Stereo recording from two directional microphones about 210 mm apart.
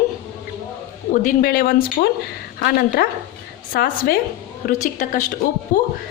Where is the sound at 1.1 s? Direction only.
35° left (ahead or behind).